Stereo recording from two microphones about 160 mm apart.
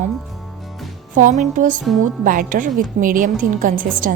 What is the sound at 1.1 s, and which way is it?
A woman's voice, 50° right (ahead or behind).